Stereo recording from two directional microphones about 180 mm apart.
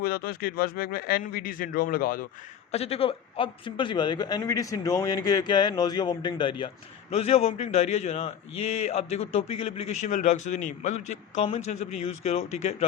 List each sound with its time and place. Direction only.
0.0 s a man's voice: 55° left (ahead or behind)
2.7 s a man's voice: 35° left (ahead or behind)